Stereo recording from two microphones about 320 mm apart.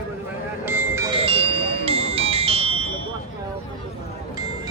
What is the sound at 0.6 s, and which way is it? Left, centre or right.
Music, centre.